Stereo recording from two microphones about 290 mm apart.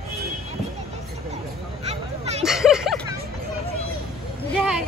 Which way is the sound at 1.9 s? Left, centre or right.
Right.